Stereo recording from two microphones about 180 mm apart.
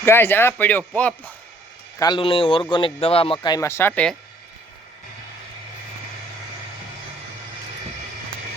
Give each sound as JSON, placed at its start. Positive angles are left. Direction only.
{"t": 0.0, "sound": "speech", "side_deg": 15}
{"t": 2.0, "sound": "a man's voice", "side_deg": 25}